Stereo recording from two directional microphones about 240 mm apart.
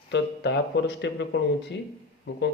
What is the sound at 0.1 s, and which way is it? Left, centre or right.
Speech, left.